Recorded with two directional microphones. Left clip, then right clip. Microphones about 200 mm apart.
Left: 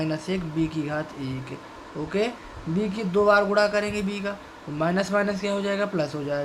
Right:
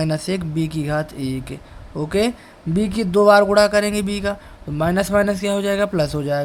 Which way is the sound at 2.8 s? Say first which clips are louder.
Right 6 dB; 55° right (ahead or behind).